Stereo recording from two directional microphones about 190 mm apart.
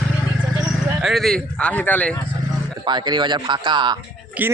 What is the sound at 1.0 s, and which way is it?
A man's voice, centre (ahead or behind).